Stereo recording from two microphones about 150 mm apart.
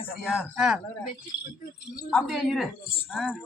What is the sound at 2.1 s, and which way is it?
A woman's voice, centre (ahead or behind).